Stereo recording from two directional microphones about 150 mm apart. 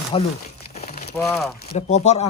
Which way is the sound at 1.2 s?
5° left (ahead or behind).